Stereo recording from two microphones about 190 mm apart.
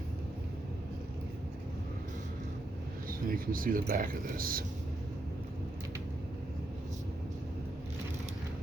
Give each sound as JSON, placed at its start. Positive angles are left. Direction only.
{"t": 3.1, "sound": "speech", "side_deg": -50}